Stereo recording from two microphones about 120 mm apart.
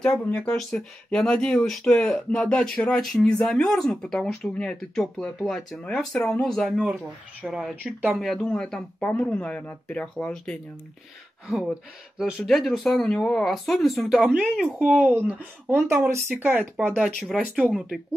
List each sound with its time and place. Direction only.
0.0 s speech: 10° left (ahead or behind)
11.4 s speech: centre (ahead or behind); by 16.6 s 15° right (ahead or behind)
16.9 s speech: centre (ahead or behind)